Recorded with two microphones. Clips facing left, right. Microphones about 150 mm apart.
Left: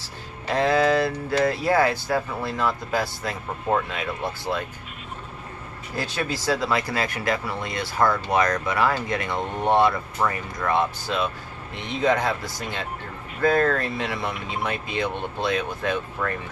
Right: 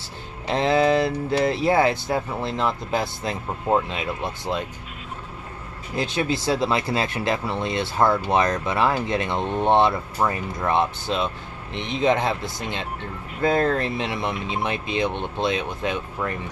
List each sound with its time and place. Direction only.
0.5 s speech: 20° right (ahead or behind)
5.9 s speech: 20° right (ahead or behind)